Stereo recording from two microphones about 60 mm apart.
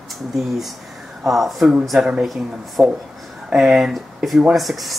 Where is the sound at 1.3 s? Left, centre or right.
Centre.